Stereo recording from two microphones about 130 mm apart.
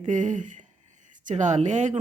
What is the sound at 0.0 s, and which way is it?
Speech, 75° right (ahead or behind).